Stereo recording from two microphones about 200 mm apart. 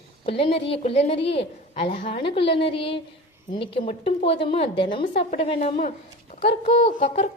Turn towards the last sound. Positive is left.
turn(degrees=35)  # may be behind; listen again after turning